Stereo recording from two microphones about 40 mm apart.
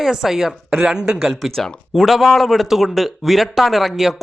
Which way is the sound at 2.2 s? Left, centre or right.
Centre.